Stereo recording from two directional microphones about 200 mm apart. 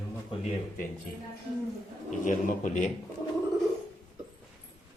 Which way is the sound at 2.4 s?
40° left (ahead or behind).